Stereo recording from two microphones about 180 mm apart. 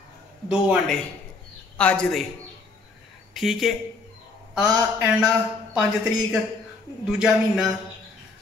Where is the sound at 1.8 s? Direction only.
5° left (ahead or behind).